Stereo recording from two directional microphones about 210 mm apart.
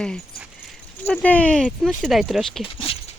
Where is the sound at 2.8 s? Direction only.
25° left (ahead or behind).